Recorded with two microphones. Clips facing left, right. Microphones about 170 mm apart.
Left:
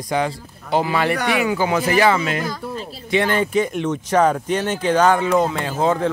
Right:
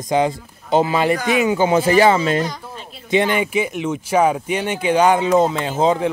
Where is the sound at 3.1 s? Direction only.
15° right (ahead or behind).